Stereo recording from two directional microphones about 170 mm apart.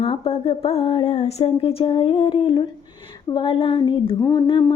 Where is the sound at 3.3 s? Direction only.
30° left (ahead or behind).